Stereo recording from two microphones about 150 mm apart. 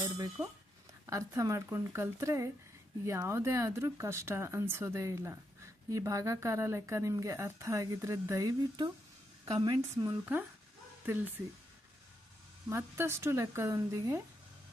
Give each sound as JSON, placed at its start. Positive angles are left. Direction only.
{"t": 0.4, "sound": "speech", "side_deg": -15}
{"t": 11.0, "sound": "speech", "side_deg": -10}
{"t": 12.6, "sound": "speech", "side_deg": -15}